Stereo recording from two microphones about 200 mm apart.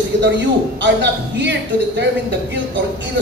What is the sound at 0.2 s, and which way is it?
A man's voice, 60° right (ahead or behind).